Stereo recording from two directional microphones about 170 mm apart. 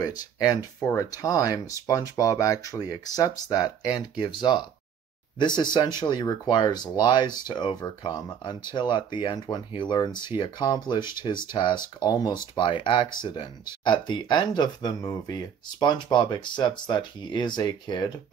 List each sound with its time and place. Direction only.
0.0 s speech: 25° left (ahead or behind)